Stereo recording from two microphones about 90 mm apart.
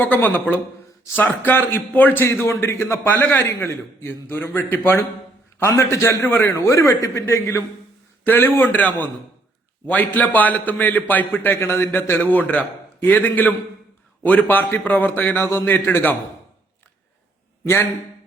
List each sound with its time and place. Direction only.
0.0 s a man's voice: 20° left (ahead or behind)